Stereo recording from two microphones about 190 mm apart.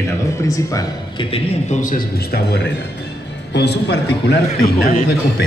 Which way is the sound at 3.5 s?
60° left (ahead or behind).